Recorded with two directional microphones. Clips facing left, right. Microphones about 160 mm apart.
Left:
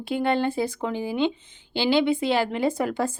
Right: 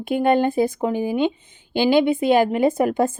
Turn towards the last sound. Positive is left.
turn(degrees=-50)  # may be behind; listen again after turning